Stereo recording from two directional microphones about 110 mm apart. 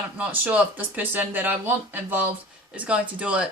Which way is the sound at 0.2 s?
15° right (ahead or behind).